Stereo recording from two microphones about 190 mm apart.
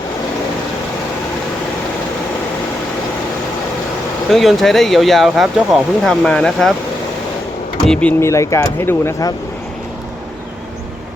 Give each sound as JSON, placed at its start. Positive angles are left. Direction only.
{"t": 4.3, "sound": "speech", "side_deg": 0}
{"t": 7.9, "sound": "speech", "side_deg": 10}